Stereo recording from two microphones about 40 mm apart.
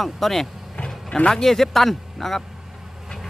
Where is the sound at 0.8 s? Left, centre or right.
Left.